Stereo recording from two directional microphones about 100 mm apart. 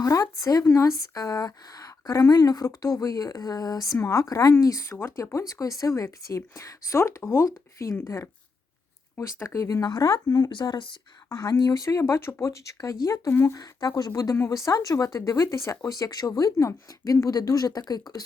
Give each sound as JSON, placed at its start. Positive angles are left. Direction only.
{"t": 0.0, "sound": "a woman's voice", "side_deg": 35}
{"t": 10.5, "sound": "speech", "side_deg": 50}
{"t": 11.3, "sound": "a woman's voice", "side_deg": 35}
{"t": 16.0, "sound": "a woman's voice", "side_deg": 40}